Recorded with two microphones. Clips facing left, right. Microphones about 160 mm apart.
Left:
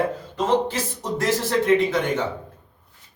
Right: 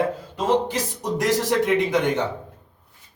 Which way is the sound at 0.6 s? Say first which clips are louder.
Right 1 dB; 15° right (ahead or behind).